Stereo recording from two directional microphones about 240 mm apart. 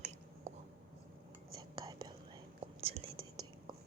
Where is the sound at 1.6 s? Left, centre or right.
Centre.